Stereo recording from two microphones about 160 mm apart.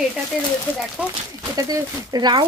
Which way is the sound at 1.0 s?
10° right (ahead or behind).